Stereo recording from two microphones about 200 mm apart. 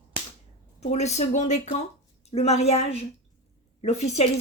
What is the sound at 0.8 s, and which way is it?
A woman's voice, 35° left (ahead or behind).